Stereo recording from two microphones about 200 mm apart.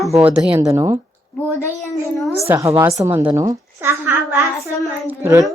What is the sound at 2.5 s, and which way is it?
A woman's voice, 15° right (ahead or behind).